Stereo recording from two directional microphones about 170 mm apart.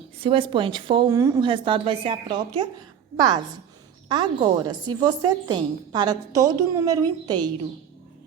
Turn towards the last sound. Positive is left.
turn(degrees=-25)  # may be behind; listen again after turning